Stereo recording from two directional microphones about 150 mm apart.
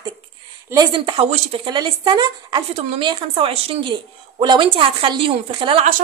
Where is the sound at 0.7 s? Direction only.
30° right (ahead or behind).